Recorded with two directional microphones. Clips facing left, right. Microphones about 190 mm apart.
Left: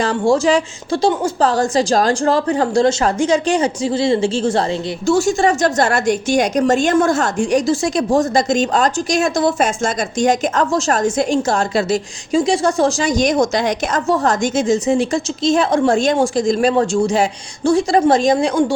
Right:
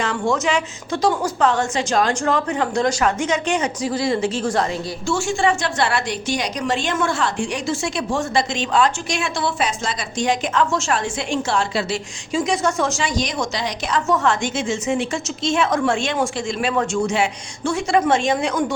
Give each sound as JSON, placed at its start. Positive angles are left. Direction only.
{"t": 0.0, "sound": "speech", "side_deg": 35}
{"t": 5.0, "sound": "a woman's voice", "side_deg": 40}